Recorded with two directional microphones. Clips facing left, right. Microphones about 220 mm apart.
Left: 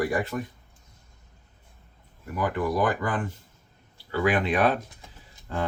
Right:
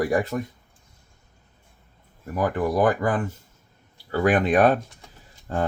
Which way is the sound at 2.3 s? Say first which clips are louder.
Right 3 dB; 45° right (ahead or behind).